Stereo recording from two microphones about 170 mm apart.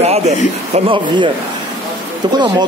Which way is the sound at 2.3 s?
25° right (ahead or behind).